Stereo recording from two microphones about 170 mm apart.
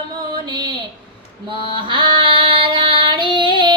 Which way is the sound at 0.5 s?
25° right (ahead or behind).